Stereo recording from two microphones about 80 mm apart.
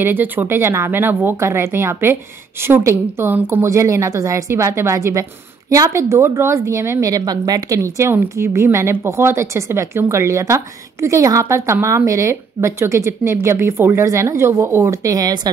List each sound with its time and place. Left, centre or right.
0.0 s speech: right
3.6 s speech: right
7.1 s a woman's voice: right
8.1 s speech: right